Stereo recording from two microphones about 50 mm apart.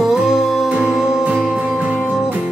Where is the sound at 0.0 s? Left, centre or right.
Centre.